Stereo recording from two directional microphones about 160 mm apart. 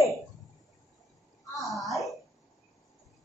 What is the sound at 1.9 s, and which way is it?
Wail, centre (ahead or behind).